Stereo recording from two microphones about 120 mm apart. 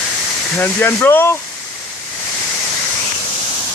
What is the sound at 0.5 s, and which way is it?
Speech, 20° left (ahead or behind).